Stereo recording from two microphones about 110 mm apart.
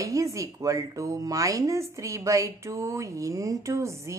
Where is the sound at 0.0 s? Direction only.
30° right (ahead or behind).